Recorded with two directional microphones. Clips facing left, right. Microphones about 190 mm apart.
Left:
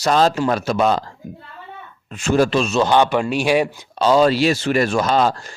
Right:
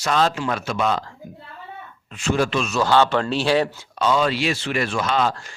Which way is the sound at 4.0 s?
35° left (ahead or behind).